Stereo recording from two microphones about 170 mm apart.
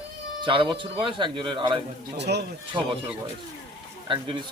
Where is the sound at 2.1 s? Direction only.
80° right.